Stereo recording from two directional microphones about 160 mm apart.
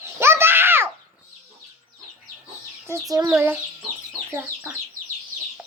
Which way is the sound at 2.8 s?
20° right (ahead or behind).